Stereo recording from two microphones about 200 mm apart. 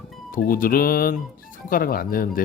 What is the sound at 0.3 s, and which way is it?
Speech, 45° left (ahead or behind).